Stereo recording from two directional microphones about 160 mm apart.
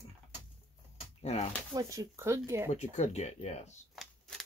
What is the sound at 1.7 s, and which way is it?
Speech, 20° right (ahead or behind).